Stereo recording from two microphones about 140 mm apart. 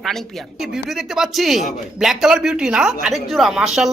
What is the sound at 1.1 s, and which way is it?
Speech, centre (ahead or behind).